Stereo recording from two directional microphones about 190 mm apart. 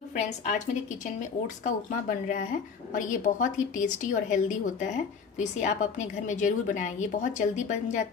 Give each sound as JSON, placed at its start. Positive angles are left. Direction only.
{"t": 1.6, "sound": "speech", "side_deg": 40}